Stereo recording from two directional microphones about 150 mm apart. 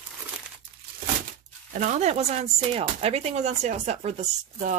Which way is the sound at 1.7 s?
55° right (ahead or behind).